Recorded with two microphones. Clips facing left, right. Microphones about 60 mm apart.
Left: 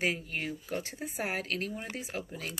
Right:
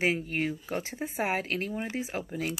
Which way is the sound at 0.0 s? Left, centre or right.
Right.